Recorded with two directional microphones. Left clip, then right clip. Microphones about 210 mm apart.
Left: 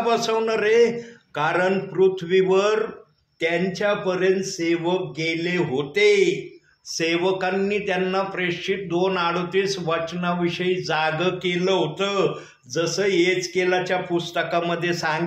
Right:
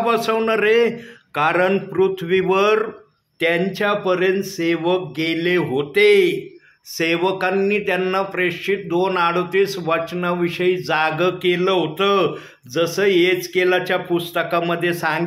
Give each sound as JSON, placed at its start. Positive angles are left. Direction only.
{"t": 0.0, "sound": "speech", "side_deg": -35}